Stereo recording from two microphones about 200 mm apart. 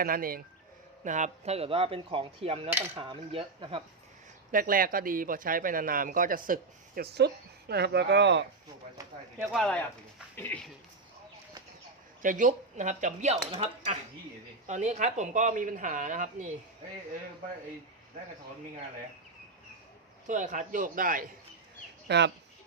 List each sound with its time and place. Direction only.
0.0 s speech: 45° right (ahead or behind); by 3.8 s 30° right (ahead or behind)
4.5 s speech: 45° right (ahead or behind); by 8.4 s 60° right (ahead or behind)
9.4 s speech: centre (ahead or behind)
12.2 s speech: 40° right (ahead or behind)
20.2 s speech: 40° right (ahead or behind)
22.0 s speech: 60° right (ahead or behind)